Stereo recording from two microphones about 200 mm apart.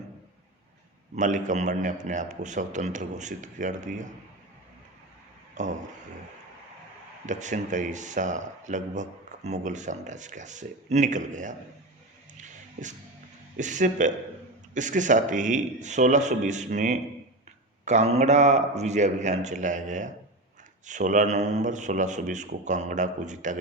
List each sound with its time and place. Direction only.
1.1 s speech: 40° right (ahead or behind)
5.6 s a sound: 35° right (ahead or behind)
7.3 s speech: 35° right (ahead or behind)
13.6 s speech: 40° right (ahead or behind)